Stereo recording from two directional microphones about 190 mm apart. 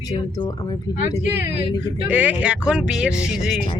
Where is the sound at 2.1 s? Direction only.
5° right (ahead or behind).